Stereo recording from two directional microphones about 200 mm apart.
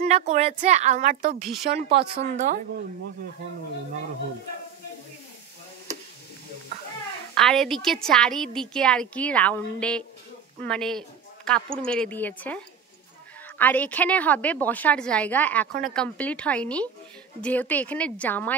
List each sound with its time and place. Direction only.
0.0 s a woman's voice: 35° right (ahead or behind)
1.8 s speech: 55° right (ahead or behind)
2.1 s a woman's voice: 35° right (ahead or behind)
7.3 s a woman's voice: centre (ahead or behind)